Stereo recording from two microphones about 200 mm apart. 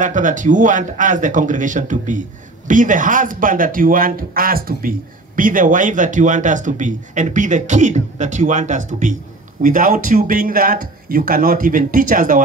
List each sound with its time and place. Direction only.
0.0 s speech: 40° right (ahead or behind)